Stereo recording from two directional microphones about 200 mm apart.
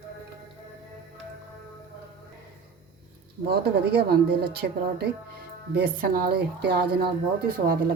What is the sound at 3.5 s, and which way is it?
Speech, 55° right (ahead or behind).